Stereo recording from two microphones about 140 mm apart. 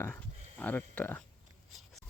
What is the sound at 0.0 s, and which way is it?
Speech, 15° left (ahead or behind).